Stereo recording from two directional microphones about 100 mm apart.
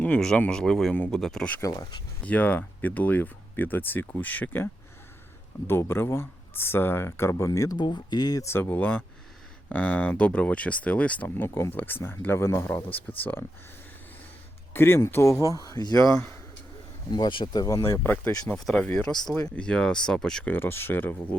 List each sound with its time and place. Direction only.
0.0 s speech: 10° left (ahead or behind)
1.6 s speech: 45° left (ahead or behind)
2.2 s speech: 15° left (ahead or behind); by 7.8 s 35° left (ahead or behind)
7.8 s speech: 50° left (ahead or behind)
8.4 s speech: 20° left (ahead or behind)
14.7 s speech: 25° left (ahead or behind)
18.3 s speech: 5° left (ahead or behind)
20.5 s speech: 20° left (ahead or behind)